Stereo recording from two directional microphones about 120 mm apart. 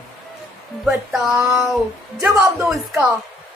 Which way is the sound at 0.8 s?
Centre (ahead or behind).